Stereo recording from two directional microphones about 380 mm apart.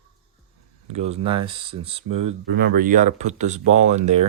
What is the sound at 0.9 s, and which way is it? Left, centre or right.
Speech, centre.